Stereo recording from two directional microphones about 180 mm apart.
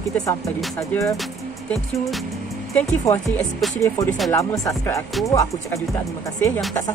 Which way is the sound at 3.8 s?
15° left (ahead or behind).